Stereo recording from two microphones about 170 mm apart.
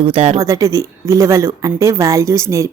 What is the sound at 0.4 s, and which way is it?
A woman's voice, 20° right (ahead or behind).